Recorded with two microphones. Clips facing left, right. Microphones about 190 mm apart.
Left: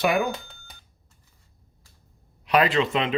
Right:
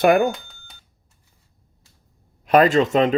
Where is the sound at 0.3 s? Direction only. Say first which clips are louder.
Left 3 dB; centre (ahead or behind).